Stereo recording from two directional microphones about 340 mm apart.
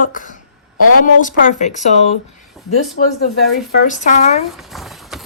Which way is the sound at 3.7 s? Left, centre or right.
Left.